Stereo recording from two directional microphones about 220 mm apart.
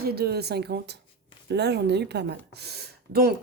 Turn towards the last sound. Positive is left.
turn(degrees=-45)  # may be behind; listen again after turning